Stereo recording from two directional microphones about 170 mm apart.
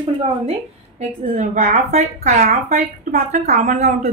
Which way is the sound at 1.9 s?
40° right (ahead or behind).